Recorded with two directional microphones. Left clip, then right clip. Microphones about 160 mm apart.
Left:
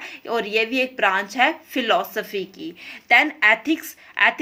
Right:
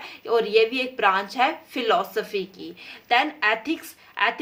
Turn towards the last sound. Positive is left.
turn(degrees=25)  # may be behind; listen again after turning